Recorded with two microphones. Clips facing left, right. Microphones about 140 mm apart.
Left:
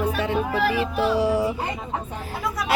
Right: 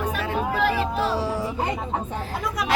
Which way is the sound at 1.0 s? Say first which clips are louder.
Left 4 dB; 15° left (ahead or behind).